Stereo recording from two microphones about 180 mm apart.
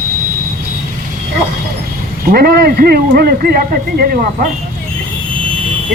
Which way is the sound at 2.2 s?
55° right (ahead or behind).